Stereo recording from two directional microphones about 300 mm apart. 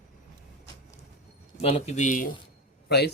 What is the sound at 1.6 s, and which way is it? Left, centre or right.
A man's voice, centre.